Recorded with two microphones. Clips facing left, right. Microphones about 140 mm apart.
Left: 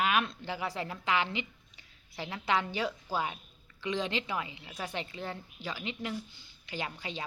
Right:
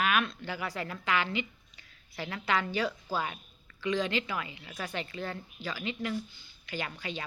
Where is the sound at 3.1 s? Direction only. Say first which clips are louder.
Left 1 dB; 10° left (ahead or behind).